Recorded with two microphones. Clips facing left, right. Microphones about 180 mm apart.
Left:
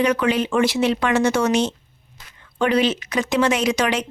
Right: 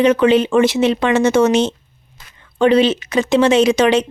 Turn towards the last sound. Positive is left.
turn(degrees=-25)  # may be behind; listen again after turning